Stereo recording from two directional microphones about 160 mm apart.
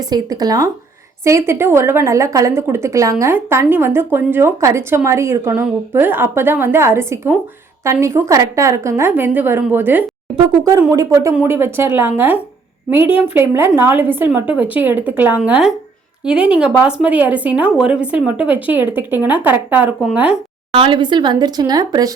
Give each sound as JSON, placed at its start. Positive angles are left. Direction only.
{"t": 0.0, "sound": "a woman's voice", "side_deg": -25}
{"t": 20.7, "sound": "speech", "side_deg": -30}